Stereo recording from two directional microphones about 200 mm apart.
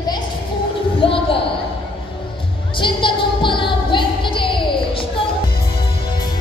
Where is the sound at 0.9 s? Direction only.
25° left (ahead or behind).